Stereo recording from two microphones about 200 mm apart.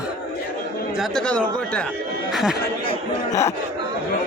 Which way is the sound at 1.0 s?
5° left (ahead or behind).